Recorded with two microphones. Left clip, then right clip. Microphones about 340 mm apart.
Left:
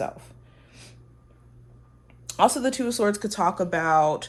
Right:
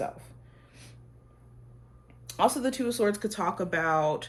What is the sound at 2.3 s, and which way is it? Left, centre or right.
Speech, left.